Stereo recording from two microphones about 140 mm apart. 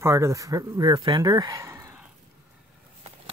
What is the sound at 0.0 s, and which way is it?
Speech, 20° right (ahead or behind).